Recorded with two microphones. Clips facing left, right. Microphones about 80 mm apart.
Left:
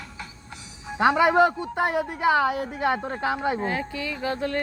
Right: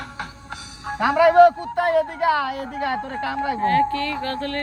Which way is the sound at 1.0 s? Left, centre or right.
Centre.